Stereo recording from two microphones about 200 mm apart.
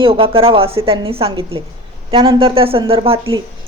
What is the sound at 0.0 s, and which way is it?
A woman's voice, 25° right (ahead or behind).